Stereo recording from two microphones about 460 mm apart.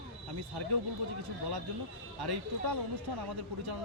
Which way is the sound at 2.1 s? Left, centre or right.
Right.